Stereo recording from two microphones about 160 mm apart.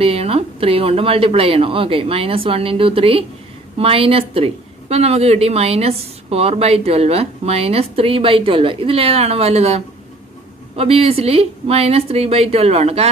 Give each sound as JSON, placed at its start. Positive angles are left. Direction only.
{"t": 0.0, "sound": "a woman's voice", "side_deg": -35}